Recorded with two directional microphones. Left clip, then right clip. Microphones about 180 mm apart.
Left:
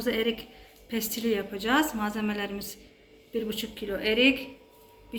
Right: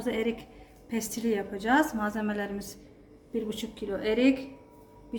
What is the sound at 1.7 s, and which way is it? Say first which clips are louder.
A woman's voice: right 1 dB; 35° right (ahead or behind).